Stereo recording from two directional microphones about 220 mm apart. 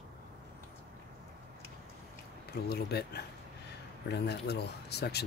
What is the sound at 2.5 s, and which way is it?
Speech, 45° left (ahead or behind).